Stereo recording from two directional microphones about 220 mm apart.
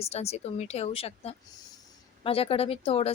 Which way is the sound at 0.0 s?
30° left (ahead or behind).